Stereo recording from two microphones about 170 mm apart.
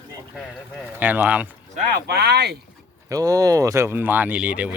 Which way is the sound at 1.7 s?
60° right (ahead or behind).